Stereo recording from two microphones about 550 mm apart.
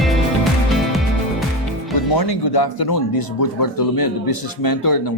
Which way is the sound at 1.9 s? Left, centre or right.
Left.